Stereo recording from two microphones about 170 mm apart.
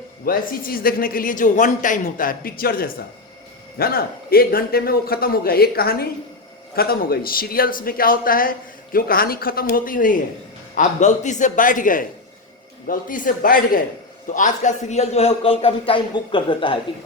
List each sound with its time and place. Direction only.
0.3 s a man's voice: 55° left (ahead or behind); by 16.7 s 30° left (ahead or behind)